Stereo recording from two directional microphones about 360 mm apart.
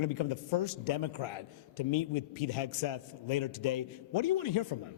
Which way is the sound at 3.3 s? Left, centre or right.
Left.